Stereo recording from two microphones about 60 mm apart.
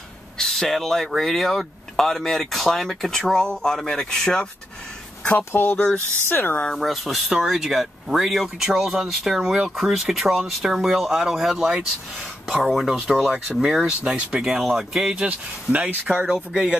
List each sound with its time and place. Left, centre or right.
0.4 s speech: centre
5.5 s speech: left
6.8 s speech: centre
15.2 s speech: right
16.3 s speech: centre